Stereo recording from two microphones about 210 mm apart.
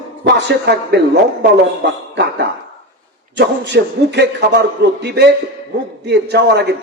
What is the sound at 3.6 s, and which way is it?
A man's voice, 55° right (ahead or behind).